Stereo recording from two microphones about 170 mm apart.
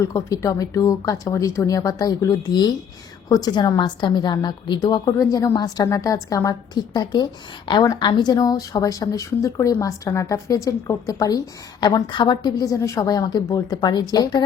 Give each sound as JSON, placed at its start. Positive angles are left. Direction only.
{"t": 0.0, "sound": "a woman's voice", "side_deg": 20}